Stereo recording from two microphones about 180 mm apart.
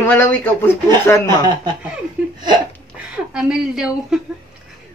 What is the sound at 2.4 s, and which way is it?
Hiccup, 25° right (ahead or behind).